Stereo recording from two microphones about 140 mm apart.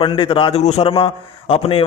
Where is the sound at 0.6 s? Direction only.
50° left (ahead or behind).